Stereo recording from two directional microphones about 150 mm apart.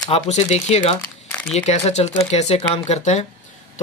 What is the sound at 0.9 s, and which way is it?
Crumpling, 15° left (ahead or behind).